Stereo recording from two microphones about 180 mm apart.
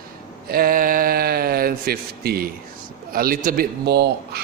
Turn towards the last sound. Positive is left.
turn(degrees=-65)  # may be behind; listen again after turning